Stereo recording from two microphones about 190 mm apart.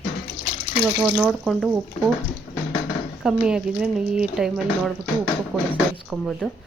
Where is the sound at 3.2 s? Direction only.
5° right (ahead or behind).